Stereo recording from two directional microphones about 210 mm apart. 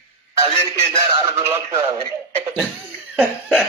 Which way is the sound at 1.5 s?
30° right (ahead or behind).